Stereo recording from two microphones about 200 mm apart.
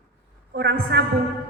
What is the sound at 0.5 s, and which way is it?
Speech, 55° right (ahead or behind).